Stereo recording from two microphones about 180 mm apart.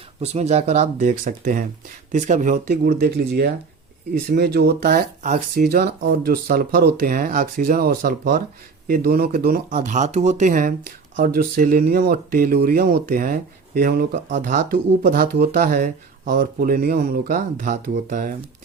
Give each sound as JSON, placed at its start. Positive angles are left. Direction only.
{"t": 0.2, "sound": "speech", "side_deg": -35}
{"t": 2.6, "sound": "speech", "side_deg": -60}